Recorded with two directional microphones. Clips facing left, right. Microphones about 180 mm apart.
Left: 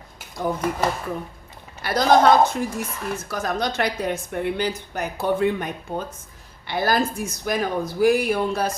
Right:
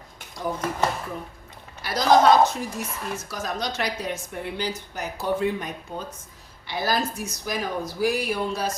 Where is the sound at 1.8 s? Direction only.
55° left (ahead or behind).